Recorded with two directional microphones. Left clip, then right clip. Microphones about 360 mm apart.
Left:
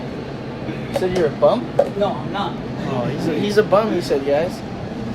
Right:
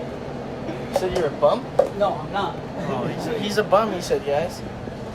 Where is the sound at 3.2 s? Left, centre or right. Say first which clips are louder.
Left 8 dB; centre.